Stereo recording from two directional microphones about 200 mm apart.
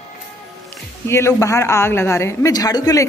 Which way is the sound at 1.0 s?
15° left (ahead or behind).